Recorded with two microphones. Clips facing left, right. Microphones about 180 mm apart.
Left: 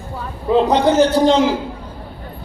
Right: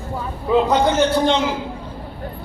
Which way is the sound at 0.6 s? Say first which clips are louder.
Left 3 dB; 35° left (ahead or behind).